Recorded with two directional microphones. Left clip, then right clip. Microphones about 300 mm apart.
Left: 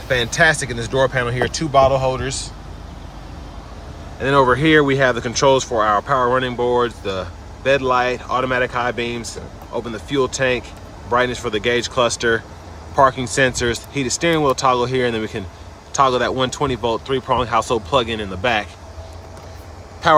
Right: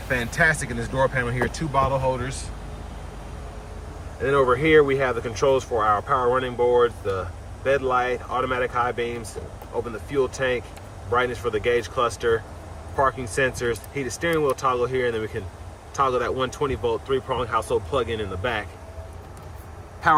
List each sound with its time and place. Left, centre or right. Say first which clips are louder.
0.1 s speech: left 6 dB; centre
4.2 s speech: left 5 dB; centre
20.0 s speech: left 5 dB; centre